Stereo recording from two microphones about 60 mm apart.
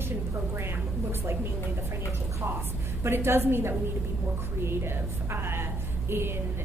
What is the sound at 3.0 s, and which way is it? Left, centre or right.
A woman's voice, right.